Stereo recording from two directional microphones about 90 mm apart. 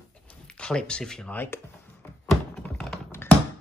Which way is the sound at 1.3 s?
30° left (ahead or behind).